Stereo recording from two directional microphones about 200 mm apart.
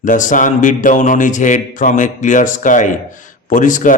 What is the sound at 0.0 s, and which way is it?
A man's voice, 40° left (ahead or behind).